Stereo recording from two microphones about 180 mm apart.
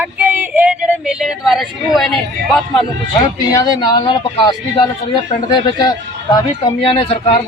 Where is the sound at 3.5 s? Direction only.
20° left (ahead or behind).